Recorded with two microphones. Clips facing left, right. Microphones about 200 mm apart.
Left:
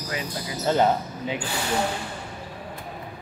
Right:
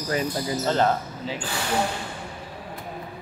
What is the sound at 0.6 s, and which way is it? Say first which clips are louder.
Speech: left 3 dB; 15° left (ahead or behind).